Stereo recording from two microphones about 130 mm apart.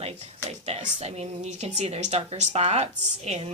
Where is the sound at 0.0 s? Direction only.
50° right (ahead or behind).